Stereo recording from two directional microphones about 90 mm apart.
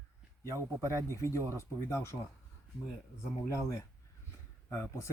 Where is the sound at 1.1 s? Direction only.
30° left (ahead or behind).